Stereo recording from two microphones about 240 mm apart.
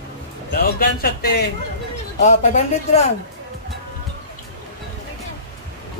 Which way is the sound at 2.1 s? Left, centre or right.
Left.